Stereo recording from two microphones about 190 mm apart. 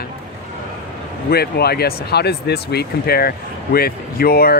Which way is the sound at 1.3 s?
55° left (ahead or behind).